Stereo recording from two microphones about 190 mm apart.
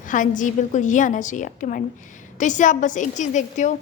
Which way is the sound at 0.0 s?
45° left (ahead or behind).